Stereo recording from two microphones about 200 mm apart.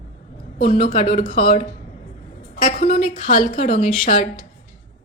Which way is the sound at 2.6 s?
40° left (ahead or behind).